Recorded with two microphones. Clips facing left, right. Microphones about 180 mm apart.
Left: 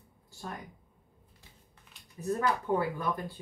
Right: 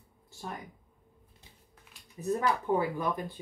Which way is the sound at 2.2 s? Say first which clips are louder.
Right 1 dB; 20° right (ahead or behind).